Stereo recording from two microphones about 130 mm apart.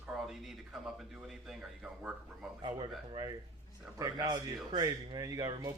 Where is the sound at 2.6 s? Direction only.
35° right (ahead or behind).